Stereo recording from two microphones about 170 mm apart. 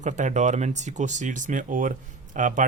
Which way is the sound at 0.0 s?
45° right (ahead or behind).